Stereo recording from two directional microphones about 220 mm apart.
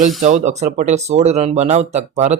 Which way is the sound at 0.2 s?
30° right (ahead or behind).